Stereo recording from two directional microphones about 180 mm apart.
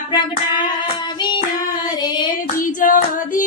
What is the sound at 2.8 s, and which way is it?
Female singing, 50° left (ahead or behind).